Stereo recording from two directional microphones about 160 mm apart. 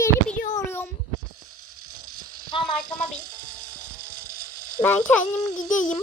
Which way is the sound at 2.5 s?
30° left (ahead or behind).